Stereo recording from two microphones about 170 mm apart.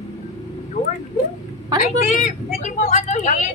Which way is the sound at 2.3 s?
45° left (ahead or behind).